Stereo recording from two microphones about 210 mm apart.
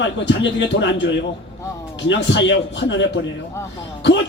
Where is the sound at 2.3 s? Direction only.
60° left (ahead or behind).